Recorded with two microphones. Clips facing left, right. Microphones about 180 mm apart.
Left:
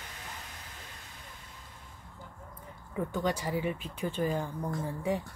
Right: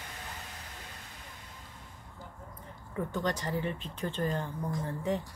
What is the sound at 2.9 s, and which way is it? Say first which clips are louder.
Speech: left 1 dB; 10° left (ahead or behind).